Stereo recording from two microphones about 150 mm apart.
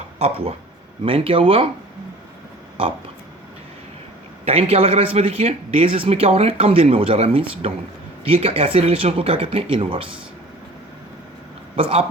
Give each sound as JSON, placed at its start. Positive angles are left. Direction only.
{"t": 0.2, "sound": "a man's voice", "side_deg": -45}
{"t": 4.4, "sound": "a man's voice", "side_deg": -40}
{"t": 11.8, "sound": "a man's voice", "side_deg": -40}